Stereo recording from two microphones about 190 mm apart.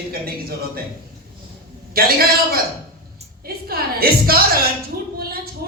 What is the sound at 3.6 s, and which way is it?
A man's voice, 50° right (ahead or behind).